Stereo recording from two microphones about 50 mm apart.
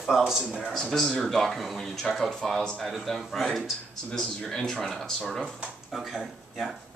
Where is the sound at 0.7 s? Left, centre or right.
Centre.